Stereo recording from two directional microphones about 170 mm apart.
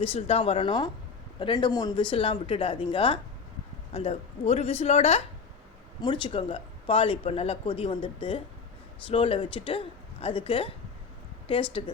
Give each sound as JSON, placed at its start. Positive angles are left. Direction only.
{"t": 0.0, "sound": "speech", "side_deg": 35}
{"t": 6.0, "sound": "speech", "side_deg": 25}
{"t": 11.8, "sound": "speech", "side_deg": 35}